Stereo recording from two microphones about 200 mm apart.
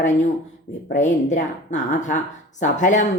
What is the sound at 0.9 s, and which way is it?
Speech, 35° left (ahead or behind).